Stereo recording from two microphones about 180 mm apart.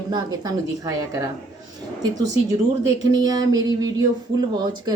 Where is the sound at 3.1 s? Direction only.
20° right (ahead or behind).